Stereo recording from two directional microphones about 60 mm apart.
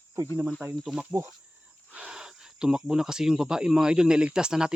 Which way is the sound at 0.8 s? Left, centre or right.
Centre.